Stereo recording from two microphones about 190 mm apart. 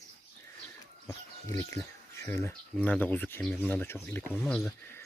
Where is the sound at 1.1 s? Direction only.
15° left (ahead or behind).